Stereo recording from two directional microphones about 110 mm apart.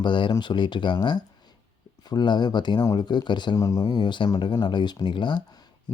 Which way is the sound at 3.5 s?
30° left (ahead or behind).